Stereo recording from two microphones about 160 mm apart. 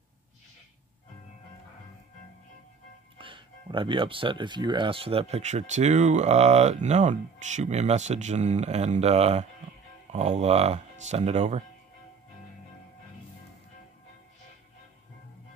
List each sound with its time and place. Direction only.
3.2 s speech: 30° right (ahead or behind)